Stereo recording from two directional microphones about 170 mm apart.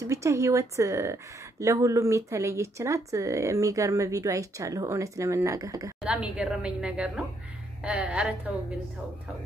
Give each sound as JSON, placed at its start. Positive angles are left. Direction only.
{"t": 0.0, "sound": "speech", "side_deg": -15}
{"t": 6.0, "sound": "a woman's voice", "side_deg": -5}